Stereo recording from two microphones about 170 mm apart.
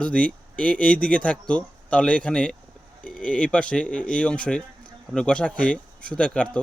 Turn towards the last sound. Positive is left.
turn(degrees=5)  # may be behind; listen again after turning